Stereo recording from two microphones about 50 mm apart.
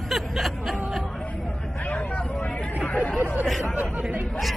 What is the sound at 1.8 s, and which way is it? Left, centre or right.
Vehicle, left.